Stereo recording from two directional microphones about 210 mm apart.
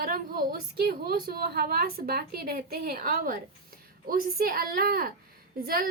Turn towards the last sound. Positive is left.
turn(degrees=-45)  # may be behind; listen again after turning